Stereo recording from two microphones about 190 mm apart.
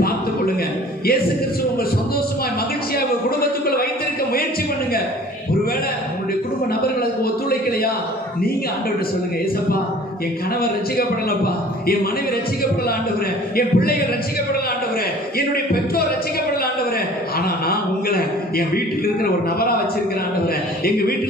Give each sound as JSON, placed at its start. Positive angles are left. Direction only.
{"t": 3.3, "sound": "a man's voice", "side_deg": 55}
{"t": 7.0, "sound": "a man's voice", "side_deg": 55}
{"t": 10.6, "sound": "a man's voice", "side_deg": 50}
{"t": 13.6, "sound": "a man's voice", "side_deg": 50}
{"t": 15.3, "sound": "a man's voice", "side_deg": 55}
{"t": 17.4, "sound": "a sound", "side_deg": 55}